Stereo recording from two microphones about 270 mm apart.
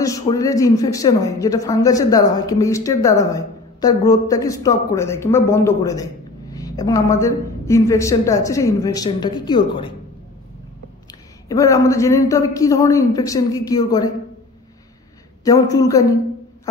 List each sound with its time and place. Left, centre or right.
0.0 s speech: centre
11.1 s speech: centre
15.4 s speech: centre